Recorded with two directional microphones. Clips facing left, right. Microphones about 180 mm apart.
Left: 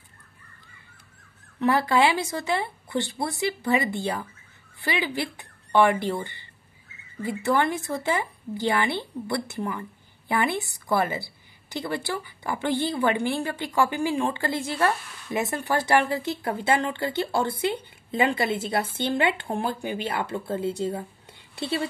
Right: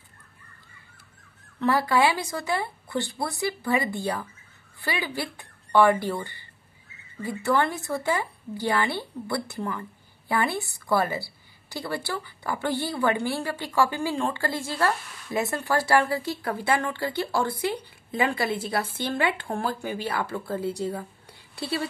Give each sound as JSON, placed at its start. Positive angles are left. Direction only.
{"t": 1.6, "sound": "a woman's voice", "side_deg": 20}